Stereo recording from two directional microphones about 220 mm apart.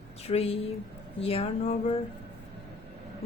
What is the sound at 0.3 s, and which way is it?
A woman's voice, 30° left (ahead or behind).